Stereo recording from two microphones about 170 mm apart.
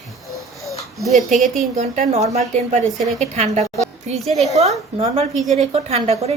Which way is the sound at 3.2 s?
45° right (ahead or behind).